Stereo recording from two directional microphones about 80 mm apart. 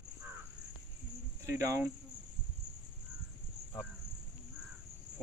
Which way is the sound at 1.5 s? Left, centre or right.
Right.